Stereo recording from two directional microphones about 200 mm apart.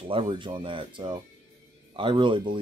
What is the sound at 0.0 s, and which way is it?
Speech, 25° right (ahead or behind).